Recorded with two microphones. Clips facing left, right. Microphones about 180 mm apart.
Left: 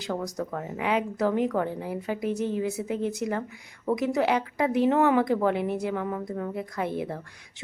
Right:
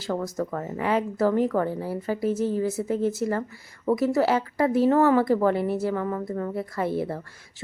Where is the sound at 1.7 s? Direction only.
15° left (ahead or behind).